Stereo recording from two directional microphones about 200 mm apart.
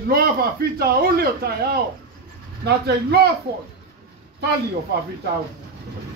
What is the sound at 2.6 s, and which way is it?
Speech, 55° right (ahead or behind).